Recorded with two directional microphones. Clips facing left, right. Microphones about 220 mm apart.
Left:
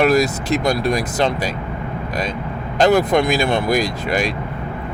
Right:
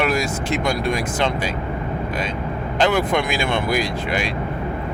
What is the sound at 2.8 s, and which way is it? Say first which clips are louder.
Speech: left 5 dB; 40° left (ahead or behind).